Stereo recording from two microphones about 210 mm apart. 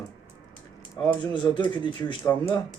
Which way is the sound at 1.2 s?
20° left (ahead or behind).